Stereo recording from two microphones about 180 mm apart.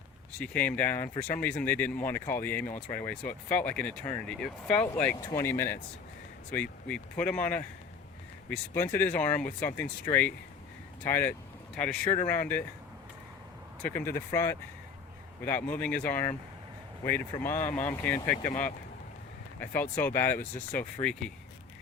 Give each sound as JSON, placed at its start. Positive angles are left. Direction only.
{"t": 0.3, "sound": "speech", "side_deg": 10}
{"t": 13.8, "sound": "speech", "side_deg": 10}
{"t": 19.5, "sound": "speech", "side_deg": 10}